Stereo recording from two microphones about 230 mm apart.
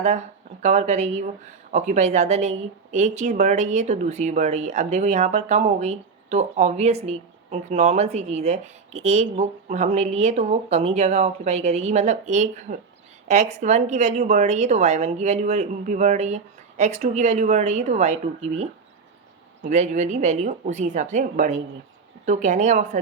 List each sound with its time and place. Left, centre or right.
0.0 s a woman's voice: right